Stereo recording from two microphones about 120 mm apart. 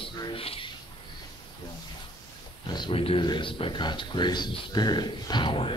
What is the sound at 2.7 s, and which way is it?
Speech, 45° left (ahead or behind).